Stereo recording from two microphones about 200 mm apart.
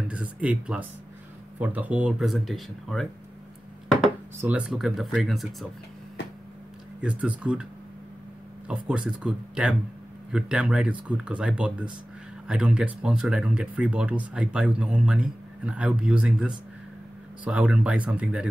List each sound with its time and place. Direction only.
0.1 s speech: 5° right (ahead or behind)
4.4 s speech: 5° right (ahead or behind)
7.0 s speech: 5° right (ahead or behind)
8.6 s speech: 5° right (ahead or behind)